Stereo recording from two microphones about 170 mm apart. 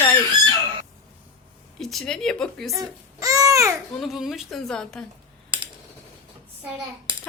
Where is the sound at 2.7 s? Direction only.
20° right (ahead or behind).